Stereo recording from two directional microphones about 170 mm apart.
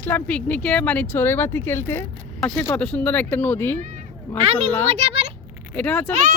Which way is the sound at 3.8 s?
50° right (ahead or behind).